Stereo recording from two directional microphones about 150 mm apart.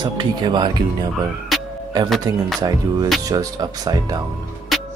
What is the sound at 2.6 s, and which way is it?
Speech, 25° right (ahead or behind).